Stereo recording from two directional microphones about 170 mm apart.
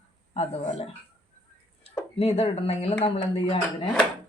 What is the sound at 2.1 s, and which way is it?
Speech, 35° left (ahead or behind).